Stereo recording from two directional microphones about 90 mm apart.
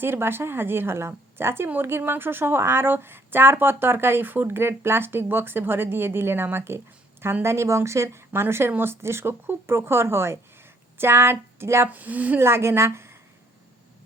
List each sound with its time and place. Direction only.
0.0 s a woman's voice: 25° right (ahead or behind)
12.5 s a woman's voice: 30° right (ahead or behind)